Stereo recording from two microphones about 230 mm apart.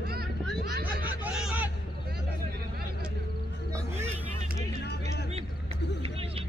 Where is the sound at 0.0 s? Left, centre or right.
Right.